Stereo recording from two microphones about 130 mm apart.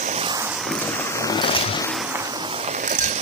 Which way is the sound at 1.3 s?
40° left (ahead or behind).